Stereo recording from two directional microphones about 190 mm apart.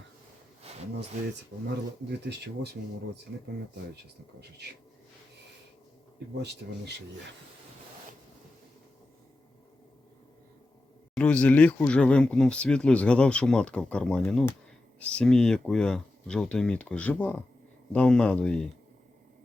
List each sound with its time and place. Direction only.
4.4 s speech: 60° right (ahead or behind)
11.1 s speech: 5° left (ahead or behind)